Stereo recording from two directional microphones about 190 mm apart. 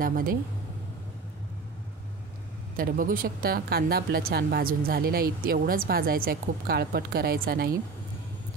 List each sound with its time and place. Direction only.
0.0 s speech: 50° right (ahead or behind)
2.8 s speech: 45° right (ahead or behind)